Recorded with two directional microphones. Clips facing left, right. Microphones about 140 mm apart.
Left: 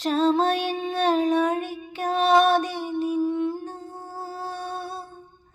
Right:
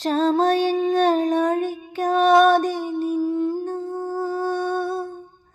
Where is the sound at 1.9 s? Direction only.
45° right (ahead or behind).